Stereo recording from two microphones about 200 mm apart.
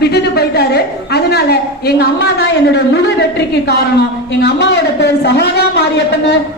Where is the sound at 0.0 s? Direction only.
55° left (ahead or behind).